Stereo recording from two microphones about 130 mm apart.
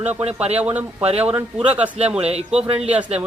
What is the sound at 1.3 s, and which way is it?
Speech, 10° right (ahead or behind).